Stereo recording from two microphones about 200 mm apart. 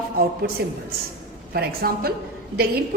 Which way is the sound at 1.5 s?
50° right (ahead or behind).